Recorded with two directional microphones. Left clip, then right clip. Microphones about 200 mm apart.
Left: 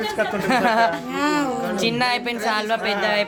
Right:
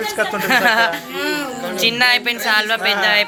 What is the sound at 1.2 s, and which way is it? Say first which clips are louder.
Music: left 1 dB; 40° left (ahead or behind).